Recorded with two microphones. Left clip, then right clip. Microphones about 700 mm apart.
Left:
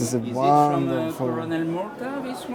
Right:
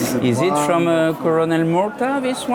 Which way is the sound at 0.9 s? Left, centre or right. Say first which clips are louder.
Right 9 dB; right.